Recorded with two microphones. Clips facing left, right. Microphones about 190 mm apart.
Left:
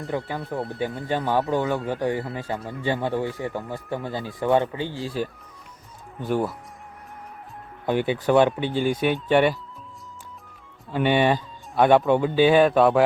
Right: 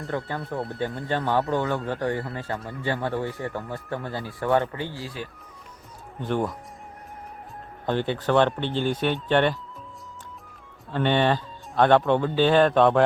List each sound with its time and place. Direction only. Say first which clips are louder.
0.2 s speech: left 1 dB; 5° left (ahead or behind)
6.1 s speech: left 2 dB; 5° left (ahead or behind)
7.9 s speech: left 3 dB; 10° left (ahead or behind)
10.9 s speech: left 2 dB; 10° left (ahead or behind)